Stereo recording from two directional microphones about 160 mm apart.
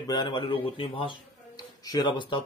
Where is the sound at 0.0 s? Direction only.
25° left (ahead or behind).